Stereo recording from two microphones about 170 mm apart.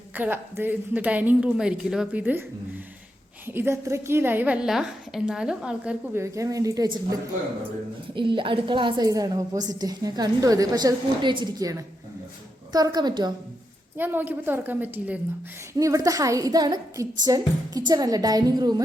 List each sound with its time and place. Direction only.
0.2 s a woman's voice: 10° right (ahead or behind)
3.4 s a woman's voice: 15° right (ahead or behind)
6.2 s a woman's voice: 20° right (ahead or behind)
8.1 s a woman's voice: 30° right (ahead or behind)
13.9 s a woman's voice: 10° right (ahead or behind)